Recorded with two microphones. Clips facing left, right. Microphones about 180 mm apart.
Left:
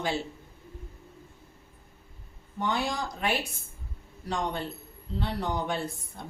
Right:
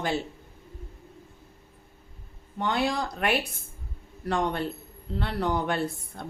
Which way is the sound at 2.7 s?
60° right (ahead or behind).